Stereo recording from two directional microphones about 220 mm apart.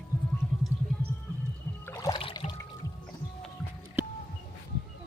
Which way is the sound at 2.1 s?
25° left (ahead or behind).